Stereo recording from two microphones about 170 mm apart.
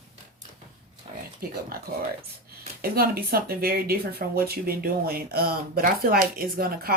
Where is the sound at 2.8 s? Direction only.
60° right (ahead or behind).